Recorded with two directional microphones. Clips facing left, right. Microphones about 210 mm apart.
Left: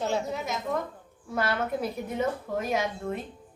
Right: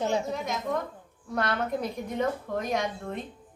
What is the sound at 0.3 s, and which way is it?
A woman's voice, 5° left (ahead or behind).